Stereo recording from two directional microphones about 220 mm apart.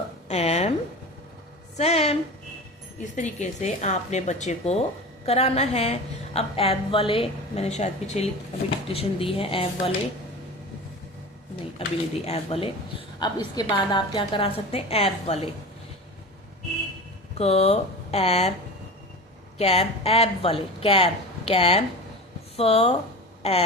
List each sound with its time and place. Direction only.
0.3 s a sound: 30° left (ahead or behind)
1.7 s a woman's voice: 30° left (ahead or behind)
11.8 s a woman's voice: 25° left (ahead or behind)
17.3 s a woman's voice: 30° left (ahead or behind)
19.5 s a woman's voice: 30° left (ahead or behind)
23.4 s a sound: 30° left (ahead or behind)